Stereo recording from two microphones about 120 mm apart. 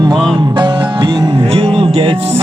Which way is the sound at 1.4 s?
55° right (ahead or behind).